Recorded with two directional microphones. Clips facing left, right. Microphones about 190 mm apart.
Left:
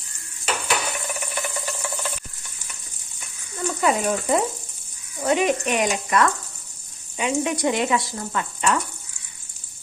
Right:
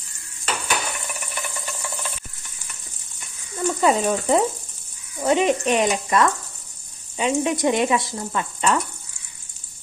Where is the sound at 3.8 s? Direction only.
25° right (ahead or behind).